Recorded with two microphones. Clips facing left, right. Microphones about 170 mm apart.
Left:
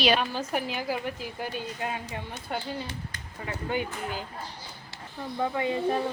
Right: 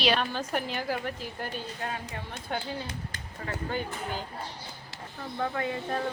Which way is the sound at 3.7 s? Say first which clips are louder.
Left 4 dB; 15° left (ahead or behind).